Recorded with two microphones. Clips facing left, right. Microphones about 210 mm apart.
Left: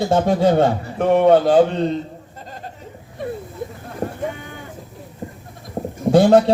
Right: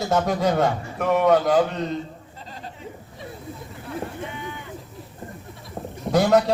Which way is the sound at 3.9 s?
45° left (ahead or behind).